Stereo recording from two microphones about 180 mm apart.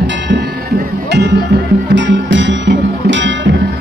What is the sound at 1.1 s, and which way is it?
Music, 70° right (ahead or behind).